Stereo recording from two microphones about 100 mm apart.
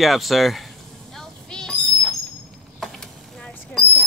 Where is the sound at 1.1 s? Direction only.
5° left (ahead or behind).